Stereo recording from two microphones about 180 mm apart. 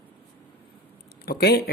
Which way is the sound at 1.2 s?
60° left (ahead or behind).